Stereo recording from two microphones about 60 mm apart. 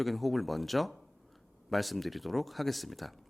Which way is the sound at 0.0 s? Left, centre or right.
Centre.